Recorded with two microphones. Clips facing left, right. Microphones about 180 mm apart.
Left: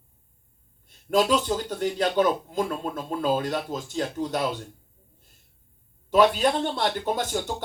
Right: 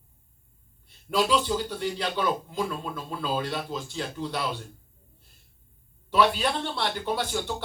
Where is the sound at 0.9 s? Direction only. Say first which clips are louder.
Left 3 dB; 45° left (ahead or behind).